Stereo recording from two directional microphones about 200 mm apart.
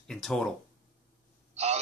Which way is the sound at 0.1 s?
5° left (ahead or behind).